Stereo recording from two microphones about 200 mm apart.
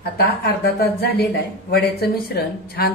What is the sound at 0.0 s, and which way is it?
Speech, 50° left (ahead or behind).